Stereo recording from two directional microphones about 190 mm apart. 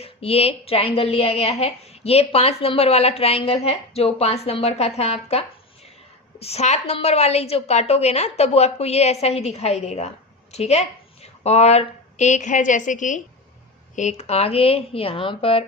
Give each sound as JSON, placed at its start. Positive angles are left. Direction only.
{"t": 0.0, "sound": "a woman's voice", "side_deg": 30}